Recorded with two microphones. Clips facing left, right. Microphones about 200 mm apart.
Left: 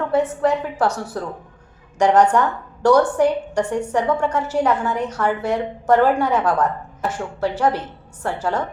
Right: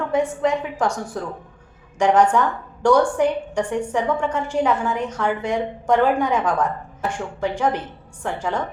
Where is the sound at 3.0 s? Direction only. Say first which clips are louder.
Left 2 dB; 10° left (ahead or behind).